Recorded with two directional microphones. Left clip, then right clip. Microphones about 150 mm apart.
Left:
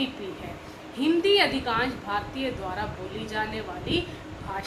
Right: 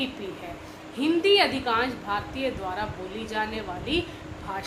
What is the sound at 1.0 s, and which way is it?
A woman's voice, 45° right (ahead or behind).